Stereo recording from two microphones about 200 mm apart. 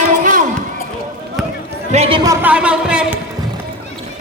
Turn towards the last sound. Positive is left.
turn(degrees=-5)  # may be behind; listen again after turning